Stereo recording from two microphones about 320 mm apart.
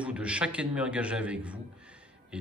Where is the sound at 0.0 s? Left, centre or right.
Centre.